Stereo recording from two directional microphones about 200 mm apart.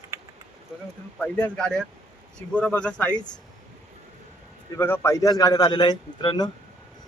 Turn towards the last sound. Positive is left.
turn(degrees=20)  # may be behind; listen again after turning